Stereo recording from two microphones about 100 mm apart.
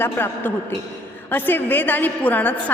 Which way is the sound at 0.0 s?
20° left (ahead or behind).